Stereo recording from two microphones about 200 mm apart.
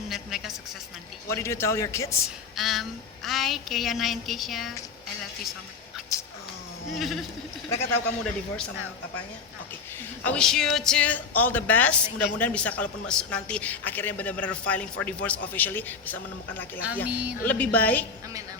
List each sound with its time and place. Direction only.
0.1 s music: centre (ahead or behind)
1.3 s a man's voice: 15° left (ahead or behind)
2.6 s child singing: centre (ahead or behind)
6.1 s cat: 15° left (ahead or behind)
6.9 s child singing: centre (ahead or behind)
7.7 s a man's voice: 10° left (ahead or behind)
10.2 s a man's voice: 5° left (ahead or behind)
17.1 s speech: 5° right (ahead or behind)
17.4 s a man's voice: 10° left (ahead or behind)